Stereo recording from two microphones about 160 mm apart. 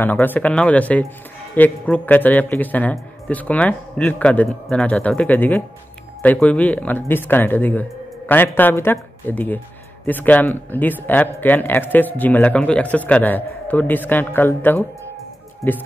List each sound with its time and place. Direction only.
0.0 s speech: 10° left (ahead or behind)